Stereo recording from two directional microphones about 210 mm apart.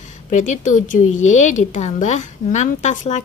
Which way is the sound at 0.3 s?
35° left (ahead or behind).